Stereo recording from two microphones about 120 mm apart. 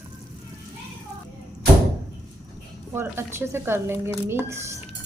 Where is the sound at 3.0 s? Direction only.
20° right (ahead or behind).